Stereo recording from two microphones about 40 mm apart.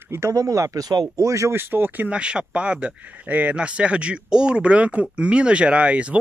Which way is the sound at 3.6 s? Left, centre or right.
Right.